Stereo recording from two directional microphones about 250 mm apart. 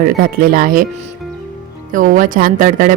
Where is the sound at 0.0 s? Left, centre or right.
Right.